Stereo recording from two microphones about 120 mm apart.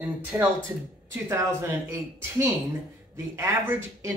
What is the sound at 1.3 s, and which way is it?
Speech, 25° right (ahead or behind).